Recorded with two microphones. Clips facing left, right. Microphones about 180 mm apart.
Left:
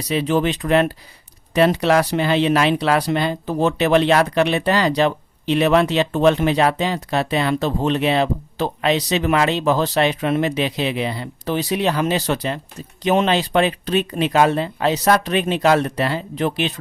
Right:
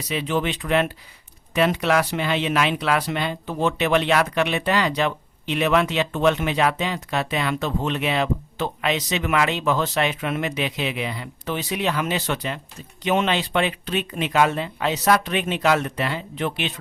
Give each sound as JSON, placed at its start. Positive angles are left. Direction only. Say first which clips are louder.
{"t": 0.1, "sound": "speech", "louder": "left 5 dB", "side_deg": 40}